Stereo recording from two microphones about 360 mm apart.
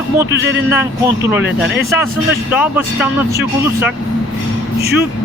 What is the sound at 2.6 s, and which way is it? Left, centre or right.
Speech, centre.